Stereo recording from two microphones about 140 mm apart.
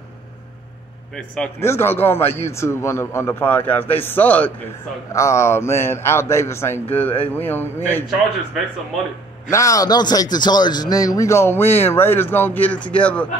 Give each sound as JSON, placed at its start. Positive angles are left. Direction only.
{"t": 1.1, "sound": "a man's voice", "side_deg": 5}
{"t": 1.6, "sound": "a man's voice", "side_deg": 15}
{"t": 9.5, "sound": "a man's voice", "side_deg": 25}